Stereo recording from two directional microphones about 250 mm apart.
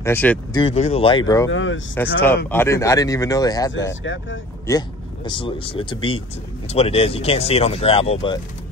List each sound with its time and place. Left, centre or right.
0.0 s speech: centre
0.6 s speech: left
1.5 s speech: left
2.5 s speech: centre
4.0 s speech: left
4.6 s speech: centre